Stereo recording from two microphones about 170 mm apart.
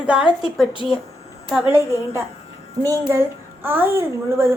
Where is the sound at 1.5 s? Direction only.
10° right (ahead or behind).